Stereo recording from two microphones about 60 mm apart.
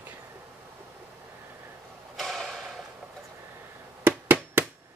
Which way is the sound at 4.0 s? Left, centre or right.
Right.